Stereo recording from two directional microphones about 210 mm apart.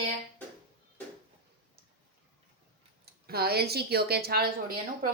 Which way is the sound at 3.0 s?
50° right (ahead or behind).